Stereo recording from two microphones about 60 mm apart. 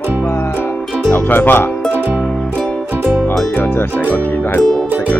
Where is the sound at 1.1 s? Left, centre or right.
Left.